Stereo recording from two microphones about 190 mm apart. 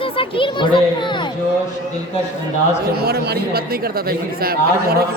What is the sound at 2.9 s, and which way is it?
A man's voice, 55° right (ahead or behind).